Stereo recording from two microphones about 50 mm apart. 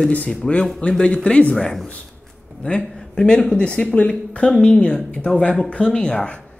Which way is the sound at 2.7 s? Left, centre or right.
Centre.